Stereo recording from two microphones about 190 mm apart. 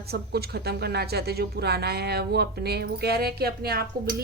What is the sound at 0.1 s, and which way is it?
Speech, 55° right (ahead or behind).